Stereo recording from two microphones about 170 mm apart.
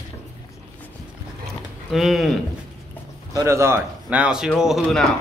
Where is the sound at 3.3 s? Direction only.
20° right (ahead or behind); by 5.0 s centre (ahead or behind).